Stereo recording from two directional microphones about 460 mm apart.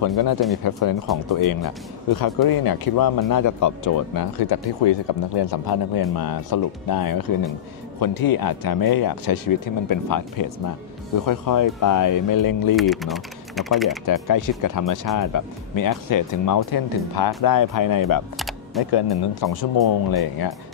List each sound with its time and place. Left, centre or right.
0.0 s speech: left
12.7 s speech: centre
14.0 s speech: left
18.8 s speech: left